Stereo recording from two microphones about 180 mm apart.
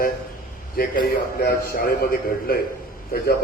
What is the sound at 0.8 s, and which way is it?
A man's voice, 55° left (ahead or behind).